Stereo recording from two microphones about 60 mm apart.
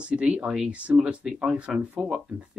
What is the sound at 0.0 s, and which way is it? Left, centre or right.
Speech, centre.